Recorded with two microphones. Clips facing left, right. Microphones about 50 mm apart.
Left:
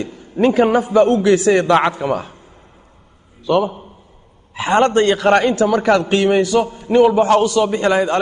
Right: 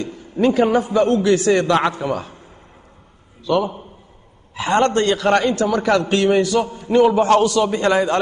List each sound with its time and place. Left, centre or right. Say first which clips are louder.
0.0 s a man's voice: left 2 dB; centre
3.4 s a man's voice: left 3 dB; centre